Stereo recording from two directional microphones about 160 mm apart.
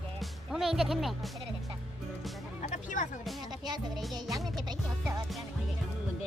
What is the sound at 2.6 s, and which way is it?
Music, 50° left (ahead or behind).